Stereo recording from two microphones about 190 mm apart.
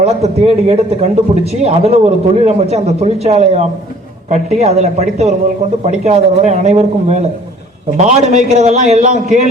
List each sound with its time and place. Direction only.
0.0 s a man's voice: 35° right (ahead or behind)